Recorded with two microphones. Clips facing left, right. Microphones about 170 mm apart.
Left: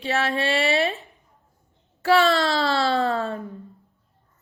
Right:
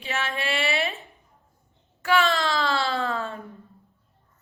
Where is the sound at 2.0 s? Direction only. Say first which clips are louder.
Left 4 dB; 35° left (ahead or behind).